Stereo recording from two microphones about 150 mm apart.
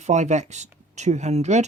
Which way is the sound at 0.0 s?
50° right (ahead or behind).